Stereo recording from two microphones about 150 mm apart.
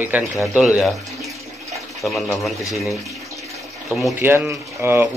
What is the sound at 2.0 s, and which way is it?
Speech, centre (ahead or behind).